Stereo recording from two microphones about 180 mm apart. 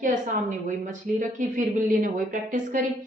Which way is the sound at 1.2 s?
45° right (ahead or behind).